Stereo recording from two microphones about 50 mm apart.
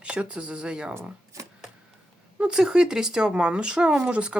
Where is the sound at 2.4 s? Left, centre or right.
Centre.